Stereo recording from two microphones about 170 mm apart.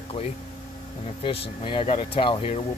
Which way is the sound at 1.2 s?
30° left (ahead or behind).